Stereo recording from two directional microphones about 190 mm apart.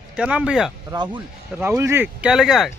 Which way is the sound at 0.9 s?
25° right (ahead or behind).